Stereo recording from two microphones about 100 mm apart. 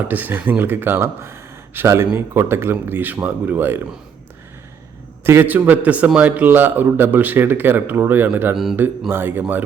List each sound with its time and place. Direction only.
0.1 s speech: 15° right (ahead or behind)
5.2 s a man's voice: 20° right (ahead or behind)